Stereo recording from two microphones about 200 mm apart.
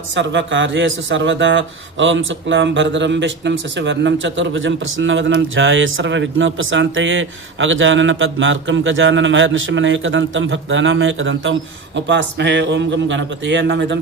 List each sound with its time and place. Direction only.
0.1 s speech: 65° right (ahead or behind)